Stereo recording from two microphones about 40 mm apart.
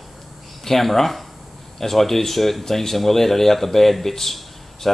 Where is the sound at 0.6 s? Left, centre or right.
Centre.